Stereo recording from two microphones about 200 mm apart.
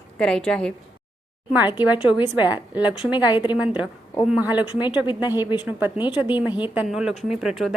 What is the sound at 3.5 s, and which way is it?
A woman's voice, 5° right (ahead or behind).